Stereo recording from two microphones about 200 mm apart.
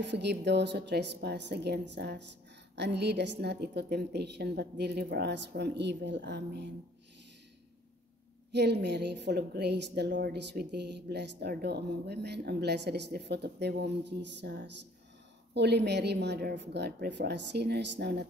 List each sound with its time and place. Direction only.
0.0 s a woman's voice: 60° right (ahead or behind)
8.5 s a woman's voice: 55° right (ahead or behind)